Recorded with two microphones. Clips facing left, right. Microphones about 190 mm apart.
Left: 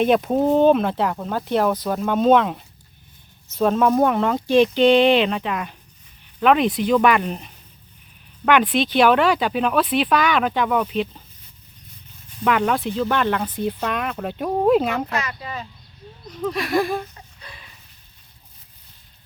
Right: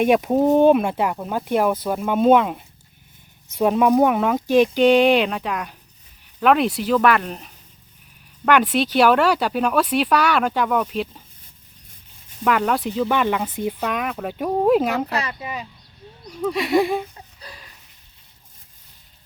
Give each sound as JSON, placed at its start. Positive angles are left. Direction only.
{"t": 0.0, "sound": "speech", "side_deg": -10}
{"t": 12.5, "sound": "speech", "side_deg": 0}
{"t": 15.1, "sound": "speech", "side_deg": -30}
{"t": 15.4, "sound": "speech", "side_deg": -15}
{"t": 16.6, "sound": "a sound", "side_deg": -20}
{"t": 17.4, "sound": "a sound", "side_deg": -35}